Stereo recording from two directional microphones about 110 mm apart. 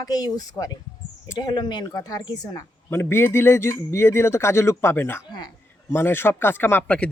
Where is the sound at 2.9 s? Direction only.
20° left (ahead or behind).